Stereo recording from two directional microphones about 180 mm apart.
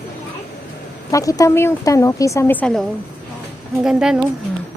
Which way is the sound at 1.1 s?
20° left (ahead or behind).